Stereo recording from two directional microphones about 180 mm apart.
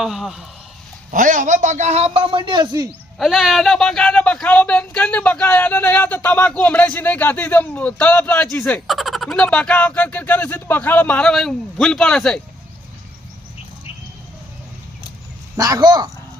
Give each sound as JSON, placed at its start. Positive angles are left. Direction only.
{"t": 0.0, "sound": "speech", "side_deg": 0}
{"t": 1.1, "sound": "a man's voice", "side_deg": -45}
{"t": 3.2, "sound": "speech", "side_deg": 0}
{"t": 15.5, "sound": "speech", "side_deg": -20}